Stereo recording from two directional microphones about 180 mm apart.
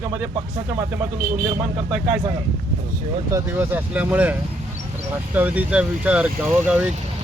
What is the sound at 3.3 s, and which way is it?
Speech, 15° right (ahead or behind).